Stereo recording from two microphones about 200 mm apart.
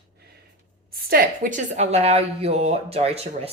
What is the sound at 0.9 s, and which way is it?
A woman's voice, 45° right (ahead or behind).